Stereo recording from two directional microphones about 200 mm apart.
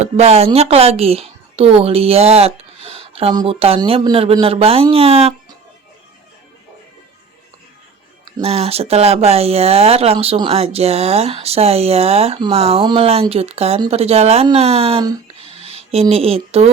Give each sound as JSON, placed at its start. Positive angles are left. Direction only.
{"t": 0.0, "sound": "a woman's voice", "side_deg": -30}
{"t": 8.4, "sound": "speech", "side_deg": -30}